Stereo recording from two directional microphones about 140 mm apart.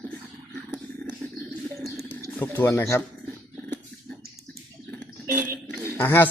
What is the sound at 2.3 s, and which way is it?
Speech, 15° left (ahead or behind).